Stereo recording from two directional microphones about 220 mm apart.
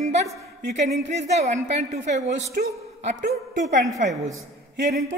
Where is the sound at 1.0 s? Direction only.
30° right (ahead or behind).